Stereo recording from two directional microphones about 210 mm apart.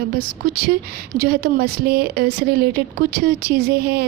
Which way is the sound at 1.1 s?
45° right (ahead or behind).